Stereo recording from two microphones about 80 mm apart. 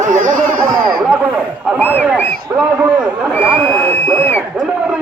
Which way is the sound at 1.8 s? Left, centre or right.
Left.